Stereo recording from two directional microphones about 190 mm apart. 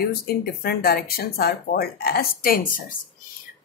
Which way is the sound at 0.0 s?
55° left (ahead or behind).